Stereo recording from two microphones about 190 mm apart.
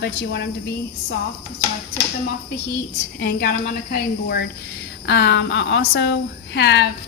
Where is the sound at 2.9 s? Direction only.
50° left (ahead or behind).